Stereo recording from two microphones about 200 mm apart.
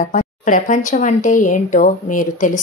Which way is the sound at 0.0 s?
40° left (ahead or behind).